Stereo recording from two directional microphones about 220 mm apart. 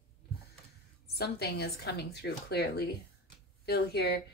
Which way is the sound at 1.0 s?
45° left (ahead or behind).